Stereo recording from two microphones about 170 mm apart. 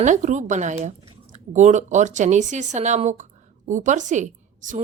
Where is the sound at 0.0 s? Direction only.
45° right (ahead or behind).